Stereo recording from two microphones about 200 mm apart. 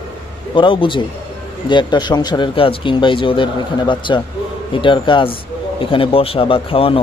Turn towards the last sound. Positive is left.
turn(degrees=25)  # may be behind; listen again after turning